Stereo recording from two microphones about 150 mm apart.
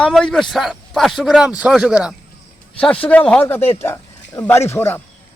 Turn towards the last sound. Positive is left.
turn(degrees=15)  # may be behind; listen again after turning